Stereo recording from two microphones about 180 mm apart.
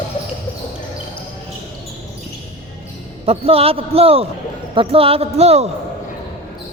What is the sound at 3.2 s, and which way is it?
A man's voice, 35° right (ahead or behind).